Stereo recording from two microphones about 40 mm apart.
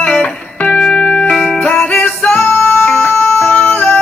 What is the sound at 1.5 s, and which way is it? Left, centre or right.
Music, centre.